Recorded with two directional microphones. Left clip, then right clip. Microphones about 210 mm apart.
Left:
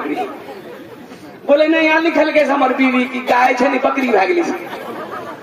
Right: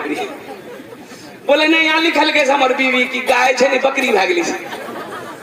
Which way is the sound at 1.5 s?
40° right (ahead or behind).